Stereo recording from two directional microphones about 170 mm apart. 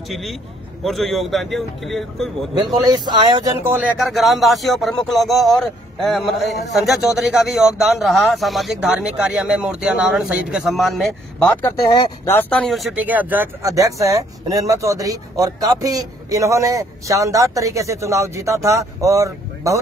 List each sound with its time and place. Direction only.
0.1 s a man's voice: centre (ahead or behind)
3.1 s speech: 25° right (ahead or behind)
3.6 s speech: 10° right (ahead or behind)
4.0 s a man's voice: centre (ahead or behind)
11.7 s speech: 20° left (ahead or behind)
12.4 s speech: 5° left (ahead or behind); by 19.8 s 20° right (ahead or behind)